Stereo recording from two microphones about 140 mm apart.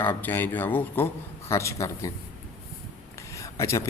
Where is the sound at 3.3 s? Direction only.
20° left (ahead or behind).